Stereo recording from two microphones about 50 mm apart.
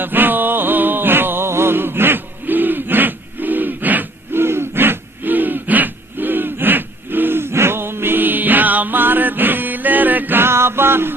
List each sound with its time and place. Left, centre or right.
0.0 s music: right